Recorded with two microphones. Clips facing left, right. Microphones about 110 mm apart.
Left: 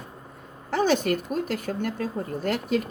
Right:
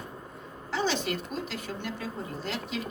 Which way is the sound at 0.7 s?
50° left (ahead or behind).